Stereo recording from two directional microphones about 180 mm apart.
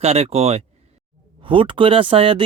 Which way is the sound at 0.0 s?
35° right (ahead or behind).